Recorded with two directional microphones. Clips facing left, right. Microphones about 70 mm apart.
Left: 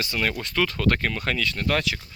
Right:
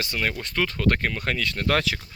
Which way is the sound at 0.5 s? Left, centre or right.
Right.